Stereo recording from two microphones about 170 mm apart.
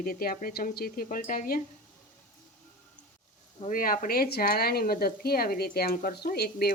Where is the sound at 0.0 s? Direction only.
60° left (ahead or behind).